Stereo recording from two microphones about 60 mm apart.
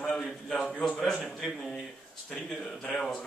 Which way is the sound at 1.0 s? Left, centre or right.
Centre.